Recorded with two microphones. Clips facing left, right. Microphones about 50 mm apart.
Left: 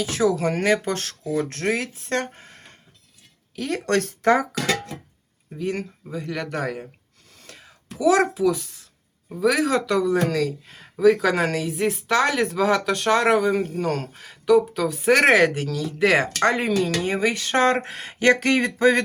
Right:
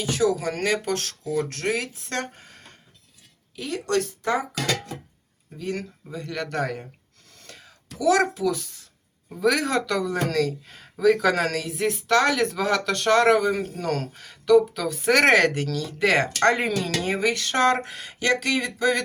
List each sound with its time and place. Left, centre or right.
0.2 s speech: left
3.5 s speech: left
5.5 s speech: centre
7.3 s whispering: centre
7.9 s speech: left
9.3 s speech: centre; by 19.0 s left